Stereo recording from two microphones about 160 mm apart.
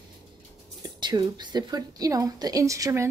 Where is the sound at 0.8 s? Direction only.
25° right (ahead or behind).